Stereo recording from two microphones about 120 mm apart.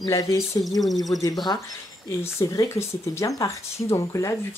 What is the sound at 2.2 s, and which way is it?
Speech, 25° left (ahead or behind).